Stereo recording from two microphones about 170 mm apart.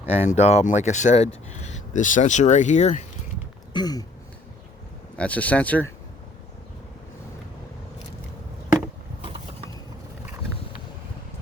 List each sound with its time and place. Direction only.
0.1 s speech: 40° left (ahead or behind)
3.7 s throat clearing: 25° left (ahead or behind)
5.1 s speech: 10° left (ahead or behind)